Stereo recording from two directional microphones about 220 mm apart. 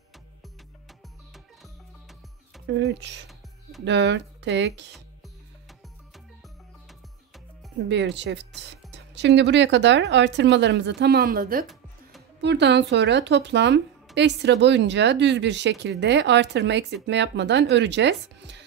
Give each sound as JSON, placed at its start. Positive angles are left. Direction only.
{"t": 1.3, "sound": "music", "side_deg": 0}
{"t": 2.6, "sound": "speech", "side_deg": -50}
{"t": 7.9, "sound": "speech", "side_deg": -55}